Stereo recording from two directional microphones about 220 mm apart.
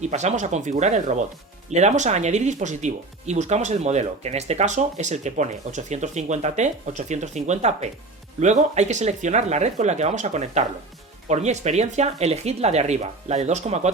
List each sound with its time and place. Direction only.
0.0 s speech: 30° right (ahead or behind)